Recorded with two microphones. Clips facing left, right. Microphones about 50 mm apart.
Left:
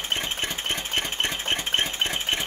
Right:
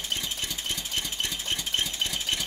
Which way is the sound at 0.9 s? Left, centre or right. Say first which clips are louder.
Left 6 dB; left.